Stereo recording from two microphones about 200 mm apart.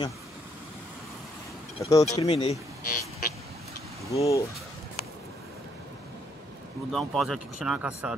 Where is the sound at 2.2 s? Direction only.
30° left (ahead or behind).